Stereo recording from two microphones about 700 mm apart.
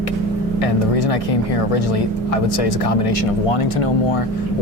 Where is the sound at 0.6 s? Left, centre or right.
Left.